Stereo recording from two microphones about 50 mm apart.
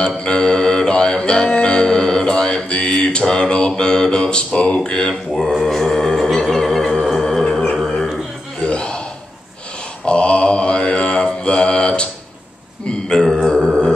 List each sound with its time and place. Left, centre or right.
0.2 s mantra: centre
5.5 s mantra: centre
6.3 s music: centre
7.7 s dog: centre
8.6 s gasp: centre
10.0 s mantra: centre
13.2 s a sound: centre